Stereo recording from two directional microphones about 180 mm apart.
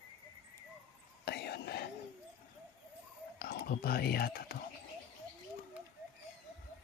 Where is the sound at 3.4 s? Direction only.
60° left (ahead or behind).